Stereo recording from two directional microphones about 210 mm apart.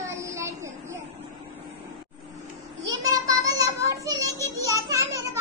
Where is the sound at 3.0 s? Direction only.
15° right (ahead or behind).